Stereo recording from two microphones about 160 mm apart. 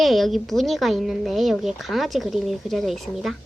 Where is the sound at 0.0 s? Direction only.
Centre (ahead or behind).